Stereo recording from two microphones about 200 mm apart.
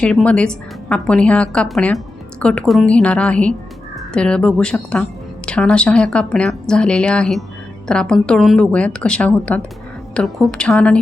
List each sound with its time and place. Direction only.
0.0 s a woman's voice: 5° left (ahead or behind)